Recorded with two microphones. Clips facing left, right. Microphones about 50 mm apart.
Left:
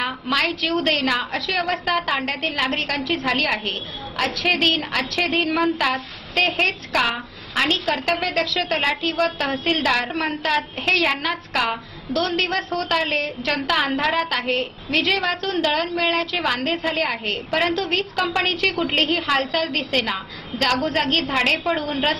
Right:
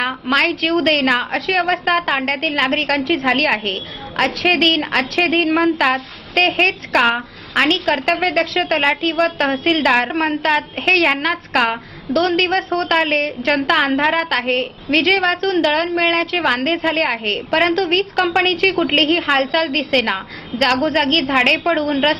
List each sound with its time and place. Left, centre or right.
0.0 s a woman's voice: right